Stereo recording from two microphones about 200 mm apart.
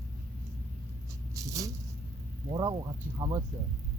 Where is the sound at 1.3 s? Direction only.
15° right (ahead or behind).